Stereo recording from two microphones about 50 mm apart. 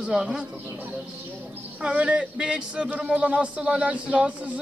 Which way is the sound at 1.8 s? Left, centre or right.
Right.